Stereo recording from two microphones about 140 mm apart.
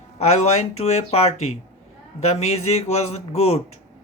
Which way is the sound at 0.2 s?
50° left (ahead or behind).